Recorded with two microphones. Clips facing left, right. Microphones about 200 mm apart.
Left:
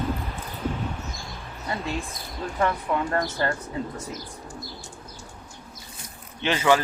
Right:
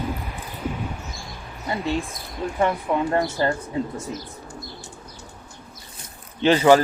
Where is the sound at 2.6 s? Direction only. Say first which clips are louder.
Right 3 dB; 20° right (ahead or behind).